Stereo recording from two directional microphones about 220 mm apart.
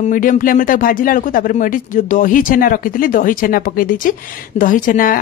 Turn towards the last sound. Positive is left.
turn(degrees=40)  # may be behind; listen again after turning